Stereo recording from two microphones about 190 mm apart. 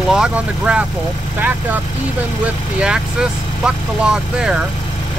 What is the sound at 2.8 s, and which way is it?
Speech, 5° right (ahead or behind).